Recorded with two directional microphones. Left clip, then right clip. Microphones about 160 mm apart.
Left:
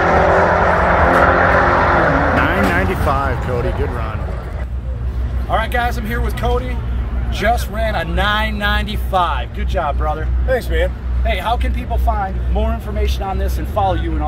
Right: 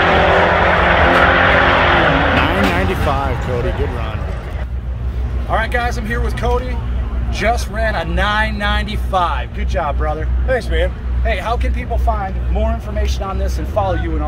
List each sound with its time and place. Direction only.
0.0 s vehicle: 10° right (ahead or behind)
3.0 s speech: 5° right (ahead or behind)
5.5 s speech: 15° right (ahead or behind)
10.5 s speech: 10° left (ahead or behind)
12.5 s speech: 30° right (ahead or behind)